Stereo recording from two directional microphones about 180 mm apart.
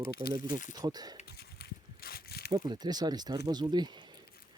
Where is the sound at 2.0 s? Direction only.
60° left (ahead or behind).